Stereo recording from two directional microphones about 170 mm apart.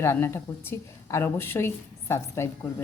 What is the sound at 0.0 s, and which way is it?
A woman's voice, 15° left (ahead or behind).